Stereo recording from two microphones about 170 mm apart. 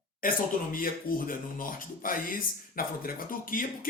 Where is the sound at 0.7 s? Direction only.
55° left (ahead or behind).